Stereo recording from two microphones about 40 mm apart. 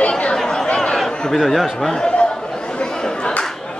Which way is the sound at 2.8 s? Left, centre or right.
Centre.